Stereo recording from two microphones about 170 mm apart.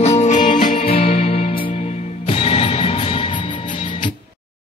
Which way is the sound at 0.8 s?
35° left (ahead or behind).